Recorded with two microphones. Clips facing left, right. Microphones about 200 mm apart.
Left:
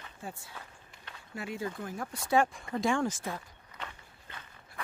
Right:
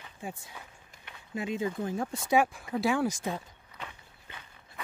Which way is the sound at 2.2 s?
5° right (ahead or behind).